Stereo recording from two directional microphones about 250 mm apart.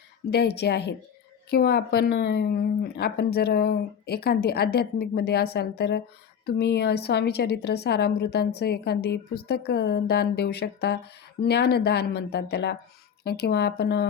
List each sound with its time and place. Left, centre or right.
0.3 s a woman's voice: left